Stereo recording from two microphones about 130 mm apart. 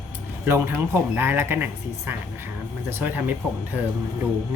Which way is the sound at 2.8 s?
15° right (ahead or behind).